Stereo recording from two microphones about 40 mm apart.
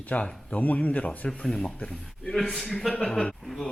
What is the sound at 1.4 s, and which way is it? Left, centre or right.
Speech, centre.